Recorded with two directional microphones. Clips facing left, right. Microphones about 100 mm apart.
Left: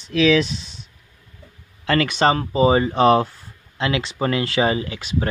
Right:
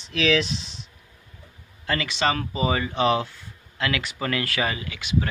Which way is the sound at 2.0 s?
45° left (ahead or behind).